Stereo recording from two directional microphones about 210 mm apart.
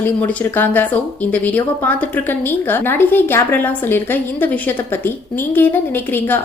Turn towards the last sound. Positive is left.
turn(degrees=10)  # may be behind; listen again after turning